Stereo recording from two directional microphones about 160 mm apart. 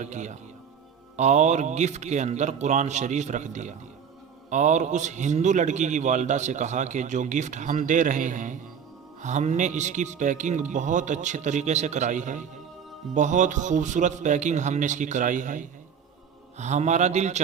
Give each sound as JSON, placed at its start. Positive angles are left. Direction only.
{"t": 0.0, "sound": "a man's voice", "side_deg": -50}